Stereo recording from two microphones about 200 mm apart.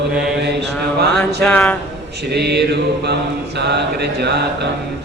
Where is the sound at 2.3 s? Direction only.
55° right (ahead or behind).